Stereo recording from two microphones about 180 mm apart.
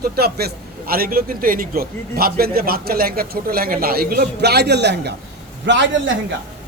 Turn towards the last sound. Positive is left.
turn(degrees=-90)